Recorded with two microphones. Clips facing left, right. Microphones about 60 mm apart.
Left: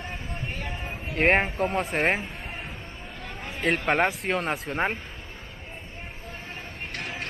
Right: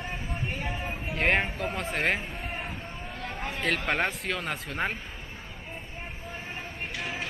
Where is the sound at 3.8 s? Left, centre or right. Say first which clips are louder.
Left 4 dB; left.